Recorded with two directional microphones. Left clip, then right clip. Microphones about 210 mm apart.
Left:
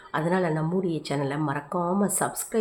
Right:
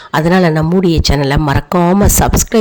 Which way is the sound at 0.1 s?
50° right (ahead or behind).